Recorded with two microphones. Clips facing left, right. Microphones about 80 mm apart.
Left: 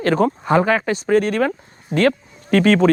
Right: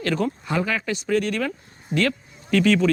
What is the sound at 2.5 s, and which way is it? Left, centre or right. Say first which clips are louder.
Speech: left 4 dB; left.